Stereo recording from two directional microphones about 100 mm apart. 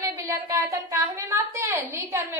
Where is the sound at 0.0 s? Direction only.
30° right (ahead or behind).